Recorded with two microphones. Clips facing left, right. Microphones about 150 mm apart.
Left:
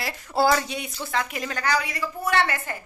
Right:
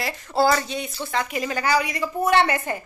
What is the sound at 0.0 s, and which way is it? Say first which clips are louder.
A woman's voice: right 2 dB; 10° left (ahead or behind).